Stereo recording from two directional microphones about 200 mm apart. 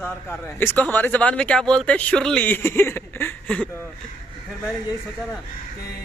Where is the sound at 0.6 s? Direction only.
10° left (ahead or behind).